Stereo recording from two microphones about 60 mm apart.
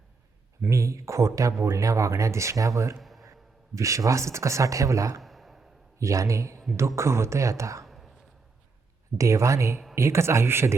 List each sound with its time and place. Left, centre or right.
0.7 s speech: right
3.0 s a sound: centre
3.8 s speech: right
5.2 s sigh: centre
6.0 s speech: right
7.9 s a sound: centre
9.1 s speech: right